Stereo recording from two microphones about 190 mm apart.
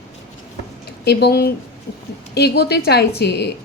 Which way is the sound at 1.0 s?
55° left (ahead or behind).